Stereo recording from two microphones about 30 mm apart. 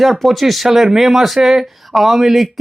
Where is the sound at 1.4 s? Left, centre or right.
Centre.